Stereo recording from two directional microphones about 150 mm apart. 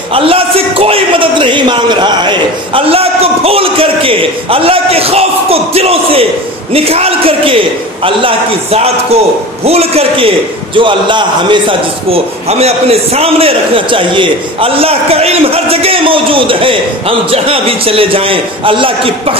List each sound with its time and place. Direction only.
0.1 s a man's voice: 40° right (ahead or behind)